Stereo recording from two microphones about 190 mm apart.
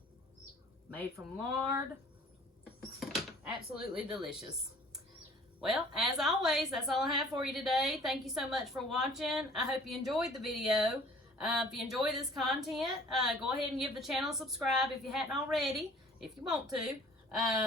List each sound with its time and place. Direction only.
1.1 s speech: 15° right (ahead or behind)
3.0 s door: centre (ahead or behind)
3.9 s a woman's voice: 5° right (ahead or behind)
5.5 s a woman's voice: centre (ahead or behind)